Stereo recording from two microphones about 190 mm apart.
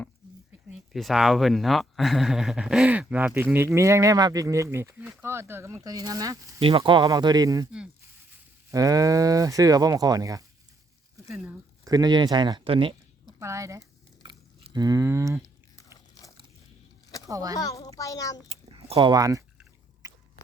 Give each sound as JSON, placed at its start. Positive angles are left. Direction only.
{"t": 0.7, "sound": "speech", "side_deg": 0}
{"t": 6.6, "sound": "speech", "side_deg": -30}
{"t": 8.7, "sound": "speech", "side_deg": -15}
{"t": 11.9, "sound": "speech", "side_deg": -20}
{"t": 13.4, "sound": "a sound", "side_deg": -15}
{"t": 17.2, "sound": "speech", "side_deg": -15}
{"t": 17.6, "sound": "a child's voice", "side_deg": 15}
{"t": 18.4, "sound": "a sound", "side_deg": -30}
{"t": 20.0, "sound": "biting", "side_deg": -20}